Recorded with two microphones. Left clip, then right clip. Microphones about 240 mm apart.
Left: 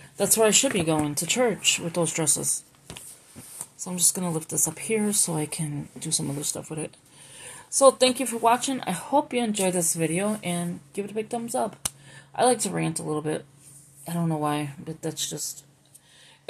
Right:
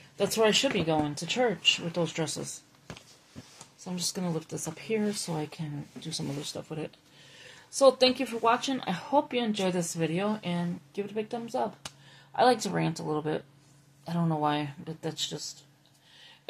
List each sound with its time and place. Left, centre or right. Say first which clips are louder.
0.2 s speech: left 3 dB; left
3.8 s speech: left 5 dB; left